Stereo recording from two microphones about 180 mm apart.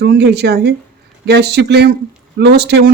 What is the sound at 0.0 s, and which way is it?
Speech, 65° right (ahead or behind).